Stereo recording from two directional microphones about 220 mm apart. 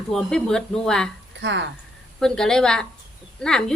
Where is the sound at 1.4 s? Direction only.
55° right (ahead or behind).